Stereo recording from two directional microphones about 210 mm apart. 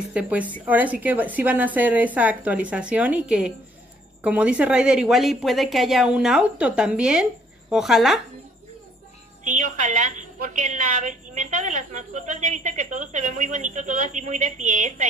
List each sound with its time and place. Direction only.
0.1 s a woman's voice: 5° right (ahead or behind)
9.4 s a woman's voice: 40° right (ahead or behind)